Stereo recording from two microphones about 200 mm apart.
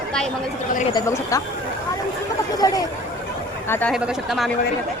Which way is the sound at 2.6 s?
20° left (ahead or behind).